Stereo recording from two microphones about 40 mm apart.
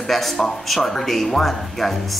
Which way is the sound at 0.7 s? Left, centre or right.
Centre.